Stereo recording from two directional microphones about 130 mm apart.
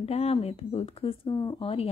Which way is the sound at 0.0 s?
50° left (ahead or behind).